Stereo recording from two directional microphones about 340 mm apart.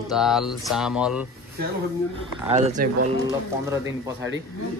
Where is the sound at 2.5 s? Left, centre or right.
Right.